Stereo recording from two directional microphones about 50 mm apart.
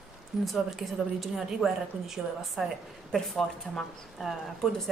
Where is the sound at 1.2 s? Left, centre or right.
Centre.